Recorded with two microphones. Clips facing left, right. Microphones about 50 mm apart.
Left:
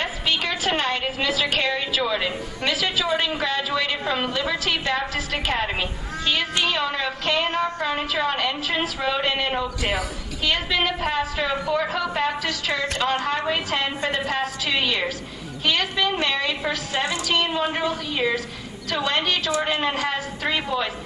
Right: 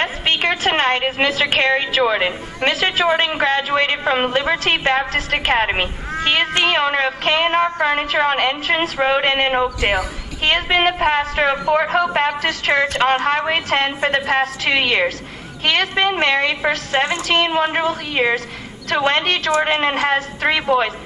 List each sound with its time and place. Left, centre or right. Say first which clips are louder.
0.0 s a woman's voice: right 6 dB; right